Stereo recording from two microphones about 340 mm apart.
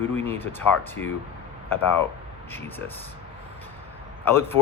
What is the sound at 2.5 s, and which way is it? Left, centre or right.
Speech, centre.